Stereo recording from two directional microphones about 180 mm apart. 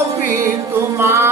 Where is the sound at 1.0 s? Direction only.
15° right (ahead or behind).